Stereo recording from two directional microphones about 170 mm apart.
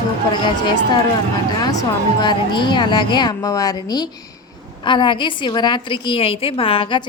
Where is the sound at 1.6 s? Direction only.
20° left (ahead or behind).